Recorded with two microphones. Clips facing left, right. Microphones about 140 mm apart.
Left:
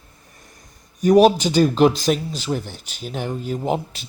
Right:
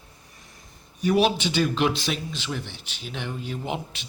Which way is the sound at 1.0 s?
40° left (ahead or behind).